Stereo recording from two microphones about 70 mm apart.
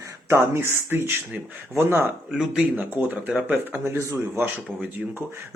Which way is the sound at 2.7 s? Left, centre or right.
Right.